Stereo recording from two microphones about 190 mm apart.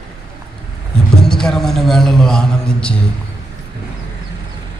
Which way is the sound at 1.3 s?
5° left (ahead or behind).